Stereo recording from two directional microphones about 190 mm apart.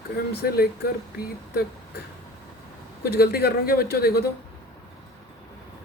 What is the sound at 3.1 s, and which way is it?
A man's voice, 55° left (ahead or behind).